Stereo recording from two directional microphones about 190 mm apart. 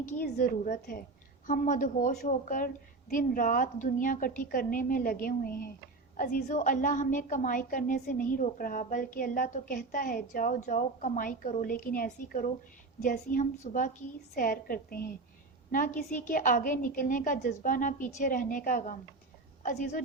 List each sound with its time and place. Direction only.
0.0 s a woman's voice: 45° left (ahead or behind)